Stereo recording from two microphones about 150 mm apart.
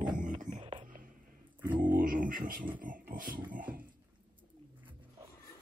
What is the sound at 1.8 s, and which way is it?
Speech, 65° right (ahead or behind).